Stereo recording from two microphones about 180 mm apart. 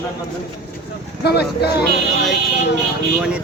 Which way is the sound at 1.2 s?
65° left (ahead or behind).